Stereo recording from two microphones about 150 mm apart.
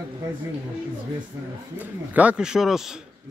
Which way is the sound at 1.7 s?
10° right (ahead or behind).